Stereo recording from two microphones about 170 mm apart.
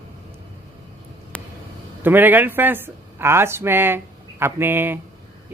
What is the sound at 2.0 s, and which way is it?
Speech, 10° right (ahead or behind).